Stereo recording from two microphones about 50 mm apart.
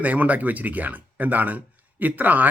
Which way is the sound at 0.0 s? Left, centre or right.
Right.